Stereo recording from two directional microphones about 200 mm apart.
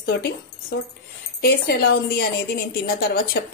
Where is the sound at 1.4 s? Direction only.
50° left (ahead or behind).